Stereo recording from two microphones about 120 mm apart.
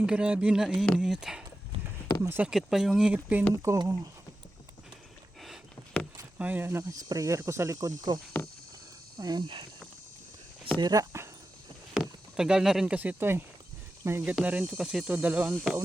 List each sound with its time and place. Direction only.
0.0 s cricket: 10° right (ahead or behind)
0.9 s speech: 5° right (ahead or behind)
1.7 s a sound: 55° right (ahead or behind)
2.2 s cricket: 20° right (ahead or behind)
2.5 s speech: 5° right (ahead or behind)
3.7 s speech: 25° right (ahead or behind)
5.4 s a sound: 5° left (ahead or behind)
6.4 s speech: 15° right (ahead or behind); by 9.6 s 40° right (ahead or behind)
10.8 s speech: 35° right (ahead or behind)
11.9 s speech: 5° right (ahead or behind)
14.0 s cricket: 15° right (ahead or behind)